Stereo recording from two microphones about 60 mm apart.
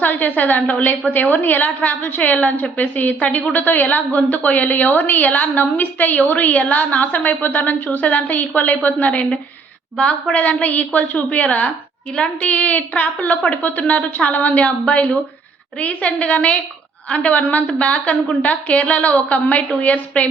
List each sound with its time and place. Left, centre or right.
0.0 s a woman's voice: left